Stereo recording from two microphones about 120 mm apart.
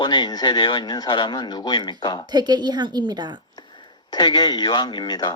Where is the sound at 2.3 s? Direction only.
35° right (ahead or behind).